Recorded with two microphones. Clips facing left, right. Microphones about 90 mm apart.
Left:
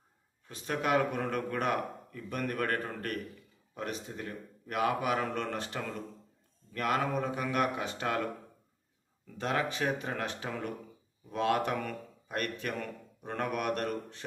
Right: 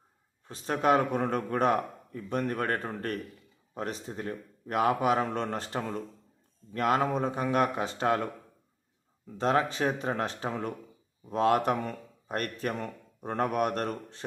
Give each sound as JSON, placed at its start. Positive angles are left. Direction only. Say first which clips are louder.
{"t": 0.4, "sound": "a man's voice", "louder": "right 6 dB", "side_deg": -35}